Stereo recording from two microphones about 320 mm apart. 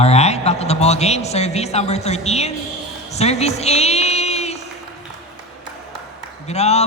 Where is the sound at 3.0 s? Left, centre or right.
Centre.